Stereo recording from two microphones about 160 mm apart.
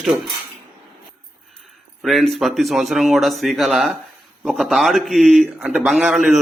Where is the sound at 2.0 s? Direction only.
Centre (ahead or behind).